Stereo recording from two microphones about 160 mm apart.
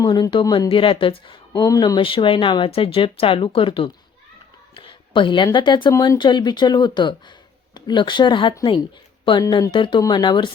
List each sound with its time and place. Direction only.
0.0 s speech: 25° left (ahead or behind)
1.6 s speech: 20° left (ahead or behind)
4.7 s a sound: 30° left (ahead or behind)
5.5 s speech: 30° left (ahead or behind)